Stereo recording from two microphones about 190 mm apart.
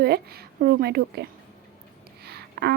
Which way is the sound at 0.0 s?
55° right (ahead or behind).